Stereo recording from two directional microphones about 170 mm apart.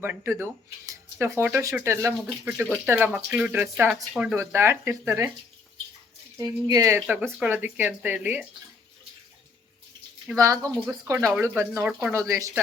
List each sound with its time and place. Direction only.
0.0 s speech: 10° right (ahead or behind)
6.3 s speech: 20° right (ahead or behind)
10.3 s speech: 20° right (ahead or behind)
12.3 s speech: 20° right (ahead or behind)